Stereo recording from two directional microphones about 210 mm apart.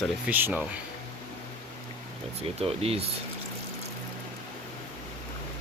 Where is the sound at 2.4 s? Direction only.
30° right (ahead or behind).